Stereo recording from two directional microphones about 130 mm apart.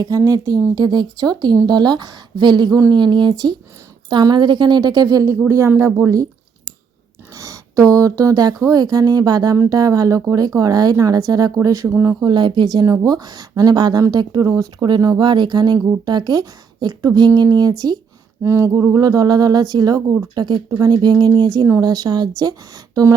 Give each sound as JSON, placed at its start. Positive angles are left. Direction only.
{"t": 0.0, "sound": "a woman's voice", "side_deg": -25}
{"t": 7.3, "sound": "speech", "side_deg": -25}
{"t": 12.2, "sound": "a woman's voice", "side_deg": -35}
{"t": 12.7, "sound": "a woman's voice", "side_deg": -25}